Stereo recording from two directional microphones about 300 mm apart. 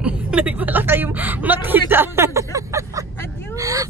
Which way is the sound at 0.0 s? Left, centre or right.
Centre.